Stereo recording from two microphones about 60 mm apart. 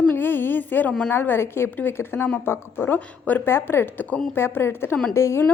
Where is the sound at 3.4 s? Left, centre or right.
Left.